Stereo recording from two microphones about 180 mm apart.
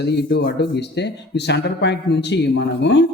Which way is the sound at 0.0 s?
70° left (ahead or behind).